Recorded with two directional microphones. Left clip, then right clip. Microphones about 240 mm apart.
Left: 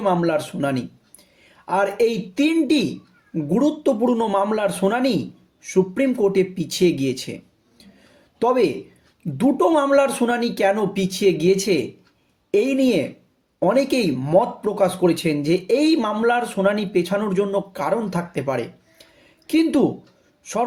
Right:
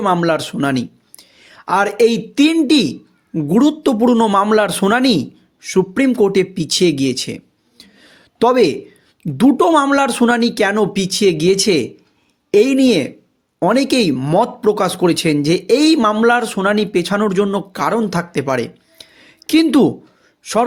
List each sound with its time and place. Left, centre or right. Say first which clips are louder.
0.0 s a man's voice: right 4 dB; right